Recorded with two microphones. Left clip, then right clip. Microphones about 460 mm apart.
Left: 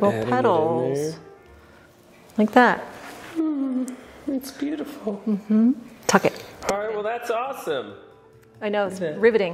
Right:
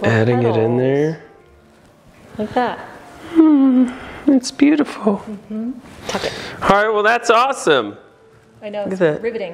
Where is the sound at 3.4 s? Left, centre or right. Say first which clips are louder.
Right 13 dB; right.